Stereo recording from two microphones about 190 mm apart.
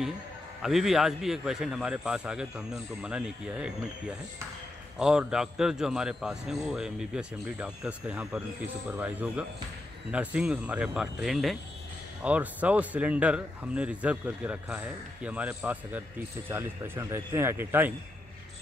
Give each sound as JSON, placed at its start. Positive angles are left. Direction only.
{"t": 0.6, "sound": "a man's voice", "side_deg": 0}